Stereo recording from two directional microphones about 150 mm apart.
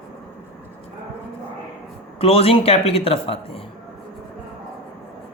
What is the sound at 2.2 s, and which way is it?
Speech, 40° left (ahead or behind).